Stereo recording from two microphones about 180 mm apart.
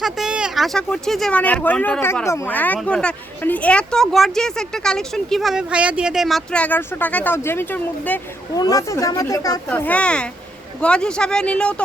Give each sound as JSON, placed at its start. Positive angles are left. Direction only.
{"t": 0.0, "sound": "speech", "side_deg": -5}
{"t": 8.5, "sound": "speech", "side_deg": 20}
{"t": 9.6, "sound": "speech", "side_deg": 10}